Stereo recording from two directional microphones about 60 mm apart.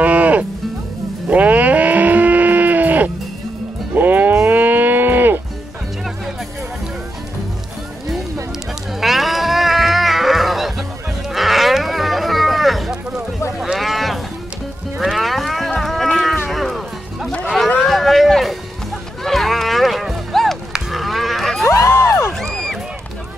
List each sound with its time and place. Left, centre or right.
0.0 s music: right
1.3 s livestock: right
9.0 s music: centre
11.3 s livestock: centre
13.6 s sheep: centre
15.0 s livestock: centre
16.4 s music: centre
20.9 s a sound: centre
21.6 s music: left
22.4 s a sound: centre